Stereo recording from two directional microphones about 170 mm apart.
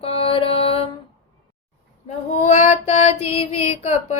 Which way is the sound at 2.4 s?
40° left (ahead or behind).